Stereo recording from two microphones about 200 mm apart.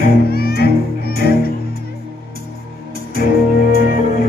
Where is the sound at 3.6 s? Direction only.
45° left (ahead or behind).